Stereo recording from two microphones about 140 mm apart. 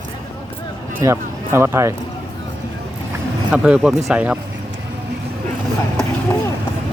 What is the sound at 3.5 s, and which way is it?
Speech, 10° right (ahead or behind).